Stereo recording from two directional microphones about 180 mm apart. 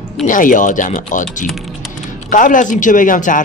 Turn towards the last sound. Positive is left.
turn(degrees=45)  # may be behind; listen again after turning